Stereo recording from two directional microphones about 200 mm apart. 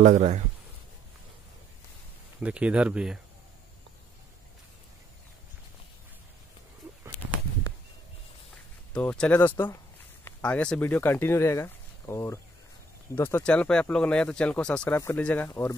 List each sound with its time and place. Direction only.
0.0 s speech: 35° right (ahead or behind)
2.4 s speech: 5° right (ahead or behind)
8.9 s speech: 5° left (ahead or behind)